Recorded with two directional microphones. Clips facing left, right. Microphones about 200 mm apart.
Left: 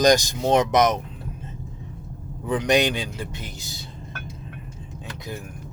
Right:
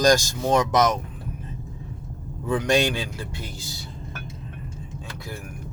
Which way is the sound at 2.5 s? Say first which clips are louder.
Left 1 dB; 20° left (ahead or behind).